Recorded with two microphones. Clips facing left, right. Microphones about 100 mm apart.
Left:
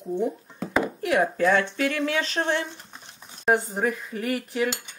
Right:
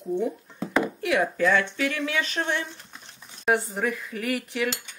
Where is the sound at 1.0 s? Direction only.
35° left (ahead or behind).